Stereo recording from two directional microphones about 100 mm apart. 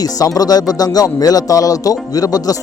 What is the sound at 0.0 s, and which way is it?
Speech, 40° left (ahead or behind).